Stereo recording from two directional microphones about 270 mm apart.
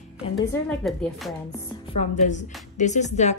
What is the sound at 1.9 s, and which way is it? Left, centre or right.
A woman's voice, left.